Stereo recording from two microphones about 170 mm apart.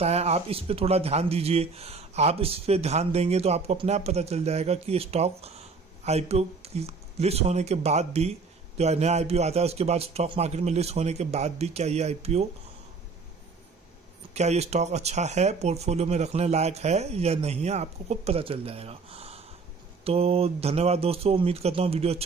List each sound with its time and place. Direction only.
0.0 s speech: 40° right (ahead or behind)
14.3 s speech: 40° right (ahead or behind)